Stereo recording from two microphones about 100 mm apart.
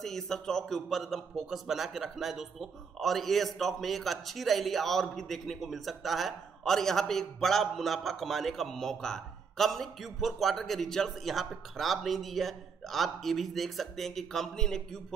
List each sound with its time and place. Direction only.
0.0 s a man's voice: 5° left (ahead or behind)